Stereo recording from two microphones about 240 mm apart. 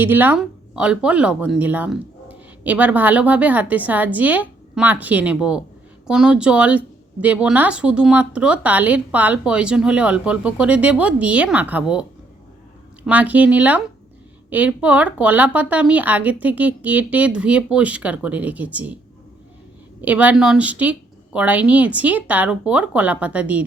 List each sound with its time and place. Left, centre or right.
0.0 s a woman's voice: centre
13.1 s a woman's voice: centre
20.0 s a woman's voice: centre